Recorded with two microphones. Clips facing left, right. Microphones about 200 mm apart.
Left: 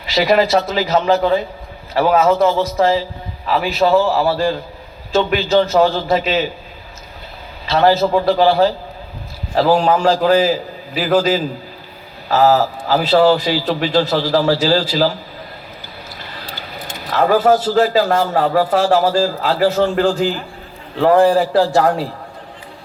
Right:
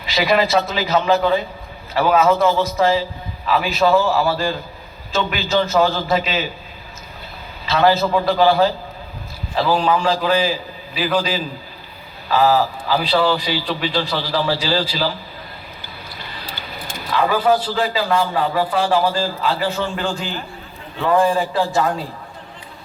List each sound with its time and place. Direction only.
0.1 s a man's voice: 40° left (ahead or behind)
7.7 s a man's voice: 35° left (ahead or behind)
17.1 s a man's voice: 45° left (ahead or behind)
21.1 s a man's voice: 65° left (ahead or behind)